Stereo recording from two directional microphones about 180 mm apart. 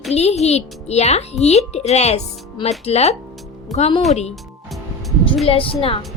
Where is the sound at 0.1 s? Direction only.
35° left (ahead or behind).